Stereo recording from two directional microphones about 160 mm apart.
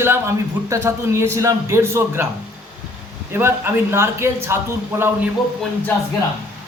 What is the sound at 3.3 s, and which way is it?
A man's voice, 15° right (ahead or behind).